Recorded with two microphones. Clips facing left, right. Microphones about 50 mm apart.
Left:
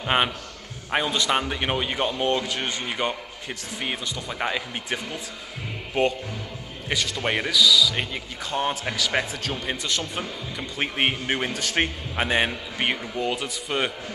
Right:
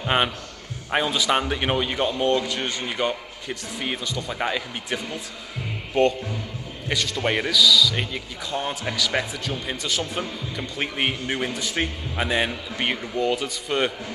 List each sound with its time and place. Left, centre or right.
0.0 s a man's voice: centre
2.8 s a man's voice: centre
6.0 s a man's voice: centre
9.8 s speech: centre
10.8 s a man's voice: centre
11.8 s a man's voice: left
12.4 s a man's voice: centre